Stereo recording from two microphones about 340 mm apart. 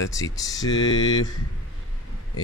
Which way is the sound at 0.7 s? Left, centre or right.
Left.